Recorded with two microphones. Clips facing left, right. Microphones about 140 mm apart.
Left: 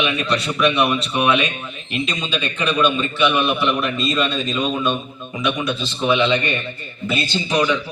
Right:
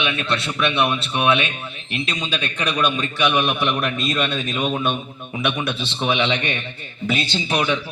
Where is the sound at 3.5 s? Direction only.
50° right (ahead or behind).